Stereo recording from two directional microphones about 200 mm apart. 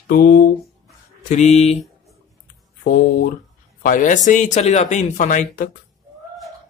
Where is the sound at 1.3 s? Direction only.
35° left (ahead or behind).